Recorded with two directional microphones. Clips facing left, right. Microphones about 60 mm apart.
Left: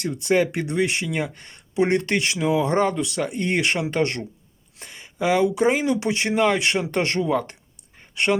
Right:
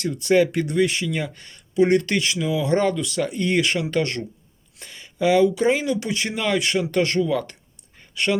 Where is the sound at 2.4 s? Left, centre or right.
Left.